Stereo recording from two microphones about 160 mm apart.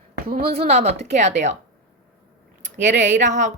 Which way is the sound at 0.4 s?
40° right (ahead or behind).